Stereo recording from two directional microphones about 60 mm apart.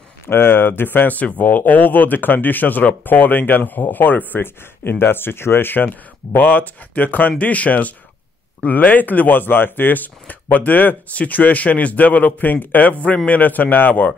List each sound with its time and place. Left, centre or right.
0.3 s speech: left